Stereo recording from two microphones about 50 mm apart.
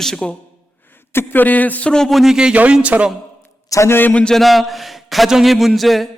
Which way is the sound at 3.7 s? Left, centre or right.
Left.